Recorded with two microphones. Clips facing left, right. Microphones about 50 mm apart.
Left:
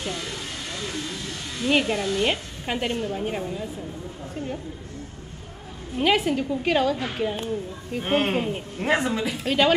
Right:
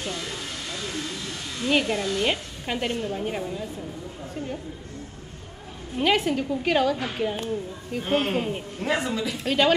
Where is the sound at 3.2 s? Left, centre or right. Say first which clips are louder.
Left 1 dB; centre.